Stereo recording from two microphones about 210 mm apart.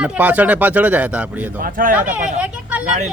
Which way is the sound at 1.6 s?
40° right (ahead or behind).